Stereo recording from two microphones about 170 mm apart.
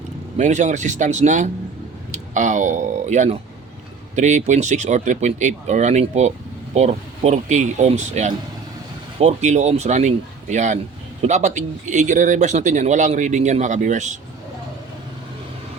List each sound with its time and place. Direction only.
0.3 s speech: 45° right (ahead or behind)